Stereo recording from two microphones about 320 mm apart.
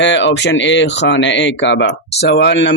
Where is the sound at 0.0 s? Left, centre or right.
Left.